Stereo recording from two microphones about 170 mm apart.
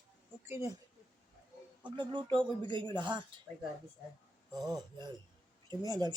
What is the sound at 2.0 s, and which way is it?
Speech, 30° right (ahead or behind).